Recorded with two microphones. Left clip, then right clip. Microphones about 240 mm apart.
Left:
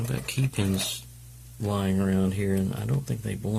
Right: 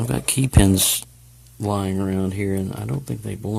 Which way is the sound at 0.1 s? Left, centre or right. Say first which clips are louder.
Right 11 dB; right.